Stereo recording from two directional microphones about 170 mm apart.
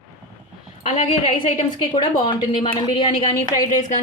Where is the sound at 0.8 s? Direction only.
40° left (ahead or behind).